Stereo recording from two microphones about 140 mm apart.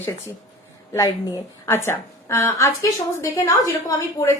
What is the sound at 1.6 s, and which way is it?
A woman's voice, 15° left (ahead or behind).